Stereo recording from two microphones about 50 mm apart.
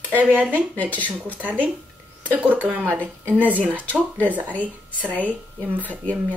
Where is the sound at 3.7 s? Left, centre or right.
Right.